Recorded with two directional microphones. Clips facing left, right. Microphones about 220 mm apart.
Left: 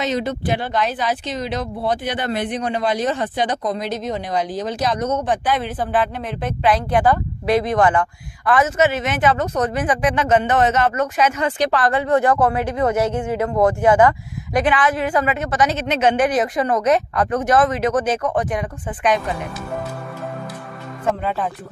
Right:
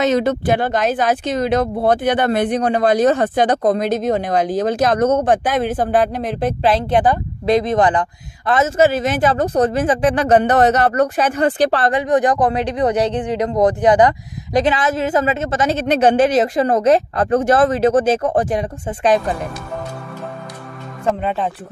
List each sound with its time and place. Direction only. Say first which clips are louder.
0.0 s speech: right 6 dB; 50° right (ahead or behind); by 11.9 s 30° right (ahead or behind)
11.9 s speech: right 1 dB; 15° right (ahead or behind)
21.2 s speech: right 2 dB; 20° right (ahead or behind)